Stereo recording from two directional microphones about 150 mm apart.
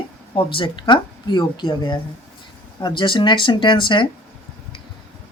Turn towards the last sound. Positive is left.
turn(degrees=30)  # may be behind; listen again after turning